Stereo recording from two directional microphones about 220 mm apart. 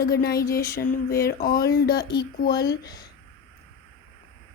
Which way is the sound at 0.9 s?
40° left (ahead or behind).